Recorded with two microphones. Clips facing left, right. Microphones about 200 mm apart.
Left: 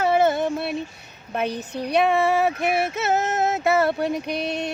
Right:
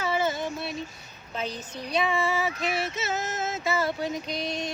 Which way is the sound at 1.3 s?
60° left (ahead or behind).